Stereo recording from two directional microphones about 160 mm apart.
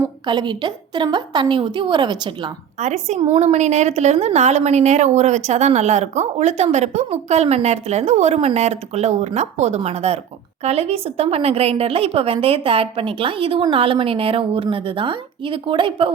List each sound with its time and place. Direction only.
0.0 s a woman's voice: 30° right (ahead or behind)
2.7 s a woman's voice: 45° right (ahead or behind)